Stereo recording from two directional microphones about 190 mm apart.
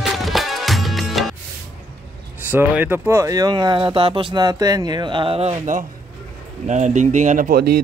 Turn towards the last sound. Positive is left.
turn(degrees=-55)  # may be behind; listen again after turning